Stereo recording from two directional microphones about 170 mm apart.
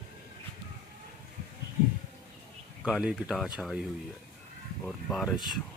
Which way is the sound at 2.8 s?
5° right (ahead or behind).